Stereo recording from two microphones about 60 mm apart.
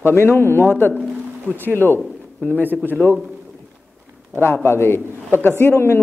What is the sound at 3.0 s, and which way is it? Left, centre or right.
Speech, left.